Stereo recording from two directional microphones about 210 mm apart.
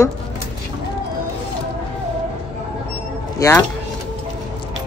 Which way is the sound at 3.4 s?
15° left (ahead or behind).